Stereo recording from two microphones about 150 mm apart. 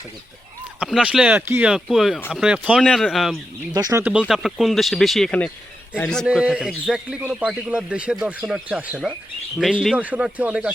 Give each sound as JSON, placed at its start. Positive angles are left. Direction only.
{"t": 0.8, "sound": "speech", "side_deg": -5}
{"t": 3.8, "sound": "speech", "side_deg": -25}
{"t": 4.0, "sound": "speech", "side_deg": -5}
{"t": 6.2, "sound": "a man's voice", "side_deg": -5}